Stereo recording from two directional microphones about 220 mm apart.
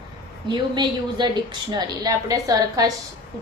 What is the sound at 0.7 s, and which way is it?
A woman's voice, 20° right (ahead or behind).